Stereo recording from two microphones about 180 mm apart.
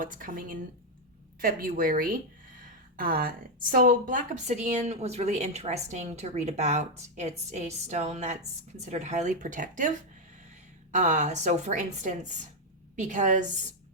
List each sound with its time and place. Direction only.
0.0 s a woman's voice: 45° right (ahead or behind)